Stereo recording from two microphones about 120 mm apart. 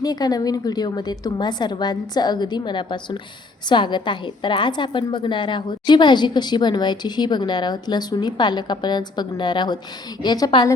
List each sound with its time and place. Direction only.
0.0 s a woman's voice: 35° left (ahead or behind)